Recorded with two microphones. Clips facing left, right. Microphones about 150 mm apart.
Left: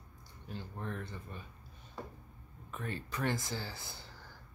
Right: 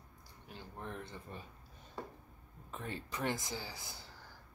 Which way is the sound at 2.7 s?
20° right (ahead or behind).